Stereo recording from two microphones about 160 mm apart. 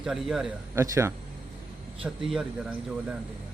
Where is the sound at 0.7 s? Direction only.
15° right (ahead or behind).